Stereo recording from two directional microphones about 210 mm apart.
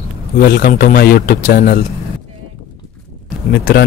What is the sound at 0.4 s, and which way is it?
Speech, 45° left (ahead or behind).